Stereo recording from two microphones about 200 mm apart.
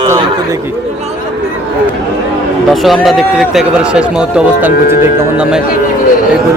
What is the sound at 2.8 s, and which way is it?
Speech, centre (ahead or behind).